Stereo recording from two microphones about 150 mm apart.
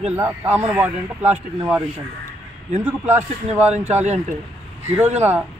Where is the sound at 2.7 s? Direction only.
50° right (ahead or behind).